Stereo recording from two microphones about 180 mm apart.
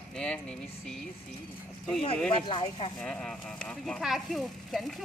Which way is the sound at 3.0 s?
5° left (ahead or behind).